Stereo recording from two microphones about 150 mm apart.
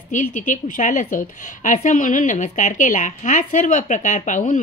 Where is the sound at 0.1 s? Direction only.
60° left (ahead or behind).